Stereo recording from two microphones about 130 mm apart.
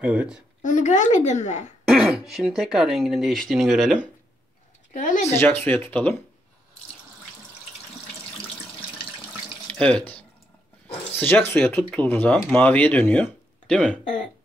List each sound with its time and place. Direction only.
0.0 s a woman's voice: 10° right (ahead or behind)
0.6 s a woman's voice: 75° left (ahead or behind)
1.9 s speech: centre (ahead or behind)
4.9 s speech: 70° left (ahead or behind)
5.2 s speech: 20° left (ahead or behind)
9.7 s speech: 10° left (ahead or behind)
11.1 s speech: 15° left (ahead or behind)
14.0 s speech: 80° left